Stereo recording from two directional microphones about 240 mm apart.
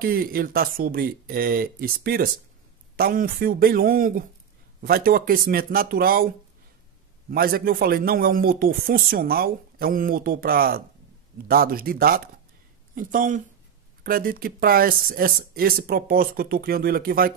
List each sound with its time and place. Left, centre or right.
0.0 s a man's voice: right